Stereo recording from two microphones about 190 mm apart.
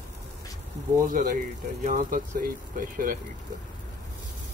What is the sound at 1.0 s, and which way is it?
Speech, 45° right (ahead or behind).